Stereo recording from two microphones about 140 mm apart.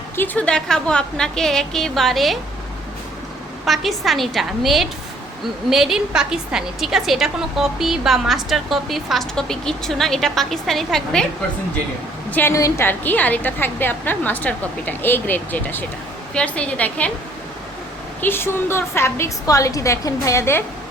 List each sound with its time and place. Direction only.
0.2 s a woman's voice: 10° left (ahead or behind)
3.7 s a woman's voice: centre (ahead or behind)
12.3 s a woman's voice: 15° left (ahead or behind)
18.2 s a woman's voice: 15° left (ahead or behind)